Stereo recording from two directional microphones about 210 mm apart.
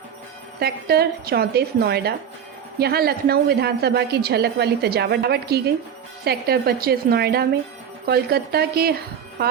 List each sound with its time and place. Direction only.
0.6 s a woman's voice: 45° right (ahead or behind)